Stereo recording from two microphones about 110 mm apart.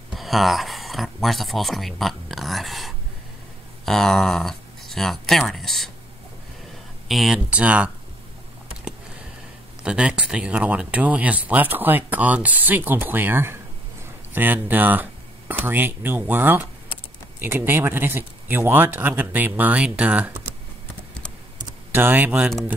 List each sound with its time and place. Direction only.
0.1 s speech: centre (ahead or behind)
7.1 s speech: centre (ahead or behind)
9.8 s speech: 10° right (ahead or behind)
21.9 s speech: 20° right (ahead or behind)